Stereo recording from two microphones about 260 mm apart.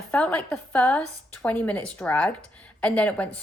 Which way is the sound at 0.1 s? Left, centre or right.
Centre.